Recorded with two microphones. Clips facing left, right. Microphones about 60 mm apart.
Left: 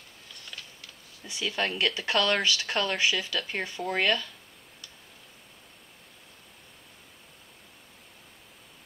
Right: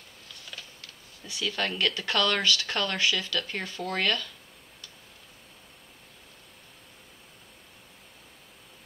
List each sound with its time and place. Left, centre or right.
1.2 s speech: centre